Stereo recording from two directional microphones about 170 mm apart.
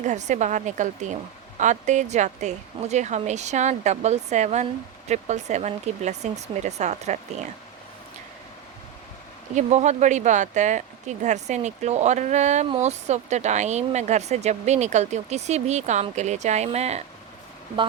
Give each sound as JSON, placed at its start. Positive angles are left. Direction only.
{"t": 0.0, "sound": "speech", "side_deg": -45}
{"t": 9.6, "sound": "speech", "side_deg": -40}